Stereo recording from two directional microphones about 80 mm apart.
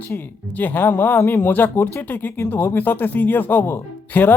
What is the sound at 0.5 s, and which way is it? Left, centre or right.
Speech, left.